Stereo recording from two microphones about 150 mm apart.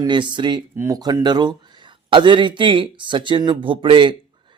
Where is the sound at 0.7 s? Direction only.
20° right (ahead or behind).